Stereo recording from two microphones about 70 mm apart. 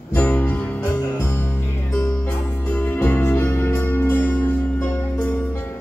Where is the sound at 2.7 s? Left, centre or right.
Left.